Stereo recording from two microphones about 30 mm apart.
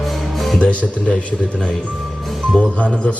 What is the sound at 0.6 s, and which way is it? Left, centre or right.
Speech, left.